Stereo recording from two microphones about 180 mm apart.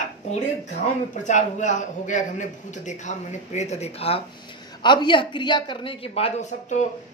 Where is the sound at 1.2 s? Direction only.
40° left (ahead or behind).